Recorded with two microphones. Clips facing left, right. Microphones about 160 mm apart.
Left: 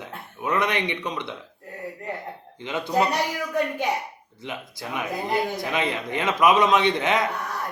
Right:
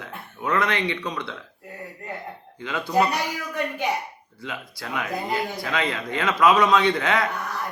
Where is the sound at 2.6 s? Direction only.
20° left (ahead or behind).